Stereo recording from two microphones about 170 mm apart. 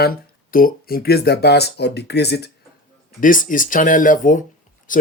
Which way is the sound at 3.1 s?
50° left (ahead or behind).